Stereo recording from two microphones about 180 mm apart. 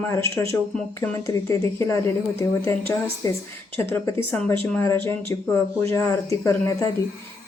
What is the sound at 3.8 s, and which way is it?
Speech, 15° left (ahead or behind).